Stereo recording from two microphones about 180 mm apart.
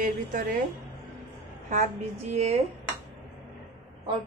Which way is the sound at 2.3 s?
35° right (ahead or behind).